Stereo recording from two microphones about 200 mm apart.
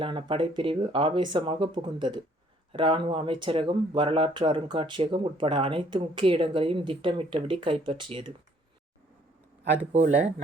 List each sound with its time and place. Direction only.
0.0 s speech: 25° right (ahead or behind)